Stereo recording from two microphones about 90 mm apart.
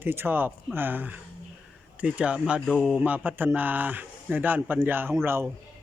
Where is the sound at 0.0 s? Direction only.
25° right (ahead or behind).